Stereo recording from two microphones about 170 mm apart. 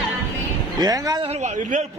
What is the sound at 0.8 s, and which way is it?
Speech, 20° right (ahead or behind).